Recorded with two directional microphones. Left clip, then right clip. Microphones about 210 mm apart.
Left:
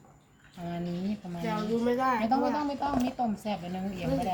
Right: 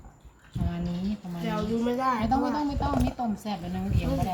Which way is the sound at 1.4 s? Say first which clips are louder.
Right 1 dB; centre (ahead or behind).